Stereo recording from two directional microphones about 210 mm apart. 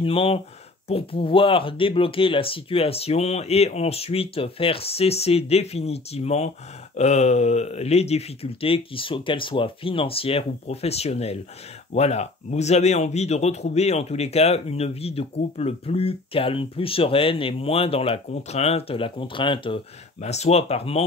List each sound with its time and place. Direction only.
0.0 s speech: 25° left (ahead or behind)